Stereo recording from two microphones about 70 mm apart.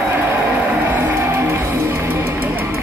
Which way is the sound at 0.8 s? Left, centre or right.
Right.